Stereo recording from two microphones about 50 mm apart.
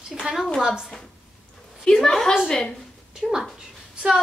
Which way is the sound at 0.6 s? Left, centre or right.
Centre.